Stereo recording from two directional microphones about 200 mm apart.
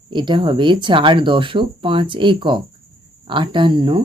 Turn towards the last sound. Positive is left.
turn(degrees=-25)  # may be behind; listen again after turning